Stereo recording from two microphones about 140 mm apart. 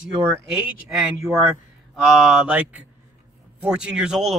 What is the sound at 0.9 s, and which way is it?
Speech, 5° right (ahead or behind).